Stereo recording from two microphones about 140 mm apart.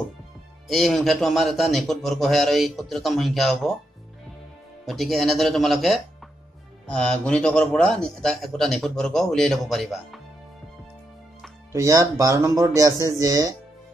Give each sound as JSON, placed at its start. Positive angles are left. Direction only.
{"t": 0.7, "sound": "a man's voice", "side_deg": 0}
{"t": 4.8, "sound": "a man's voice", "side_deg": 0}
{"t": 11.7, "sound": "speech", "side_deg": -25}